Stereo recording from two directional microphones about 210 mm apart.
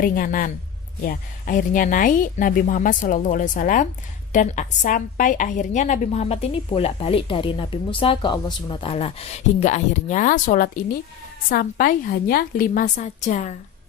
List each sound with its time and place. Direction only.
0.0 s a woman's voice: 40° left (ahead or behind)